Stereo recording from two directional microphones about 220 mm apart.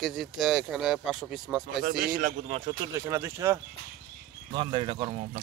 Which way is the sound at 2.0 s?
40° right (ahead or behind).